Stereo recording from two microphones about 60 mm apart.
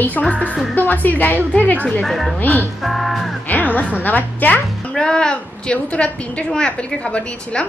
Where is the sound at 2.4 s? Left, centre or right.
Left.